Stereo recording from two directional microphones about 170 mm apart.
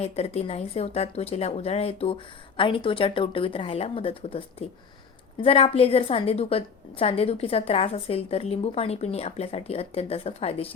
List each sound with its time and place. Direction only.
0.0 s a woman's voice: 40° left (ahead or behind)